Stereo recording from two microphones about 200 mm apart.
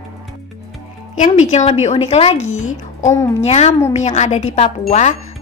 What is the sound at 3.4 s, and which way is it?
A woman's voice, 30° left (ahead or behind).